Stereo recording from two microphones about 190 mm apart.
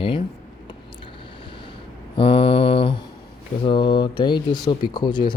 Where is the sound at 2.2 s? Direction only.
30° left (ahead or behind).